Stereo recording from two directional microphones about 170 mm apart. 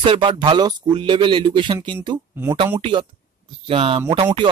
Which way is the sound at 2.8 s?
30° right (ahead or behind).